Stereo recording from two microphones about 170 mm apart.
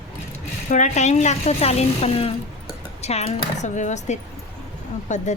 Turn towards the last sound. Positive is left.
turn(degrees=45)  # may be behind; listen again after turning